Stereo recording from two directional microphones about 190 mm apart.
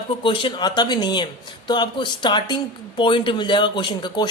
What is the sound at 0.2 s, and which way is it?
A man's voice, 25° left (ahead or behind).